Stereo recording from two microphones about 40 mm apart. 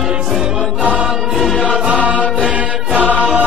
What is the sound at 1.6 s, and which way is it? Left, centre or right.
Music, right.